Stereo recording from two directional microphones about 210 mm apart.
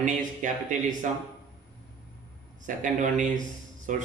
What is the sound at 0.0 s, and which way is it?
Speech, 35° right (ahead or behind).